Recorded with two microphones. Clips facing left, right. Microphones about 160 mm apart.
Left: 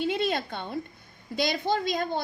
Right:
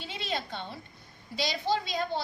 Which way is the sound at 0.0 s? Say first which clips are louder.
Left 9 dB; 55° left (ahead or behind).